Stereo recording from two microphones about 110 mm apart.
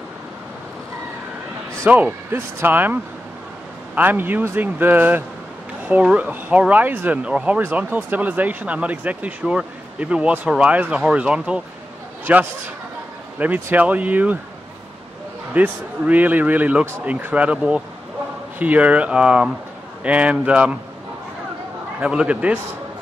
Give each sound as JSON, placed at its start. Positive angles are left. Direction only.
{"t": 1.9, "sound": "speech", "side_deg": -15}
{"t": 15.5, "sound": "speech", "side_deg": -15}
{"t": 22.0, "sound": "speech", "side_deg": -10}